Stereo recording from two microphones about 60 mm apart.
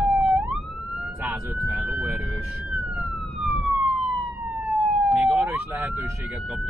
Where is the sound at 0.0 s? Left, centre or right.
Centre.